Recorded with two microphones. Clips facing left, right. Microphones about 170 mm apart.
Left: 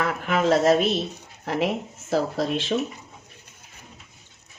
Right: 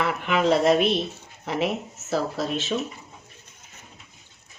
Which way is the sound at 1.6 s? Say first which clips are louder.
Left 1 dB; 10° left (ahead or behind).